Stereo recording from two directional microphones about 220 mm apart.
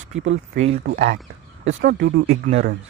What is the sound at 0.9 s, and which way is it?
Speech, 50° right (ahead or behind).